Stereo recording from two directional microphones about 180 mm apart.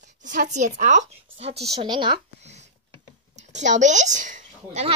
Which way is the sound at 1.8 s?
25° right (ahead or behind).